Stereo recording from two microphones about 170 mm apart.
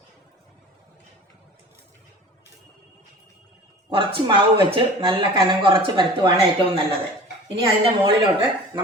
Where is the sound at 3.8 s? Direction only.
30° right (ahead or behind).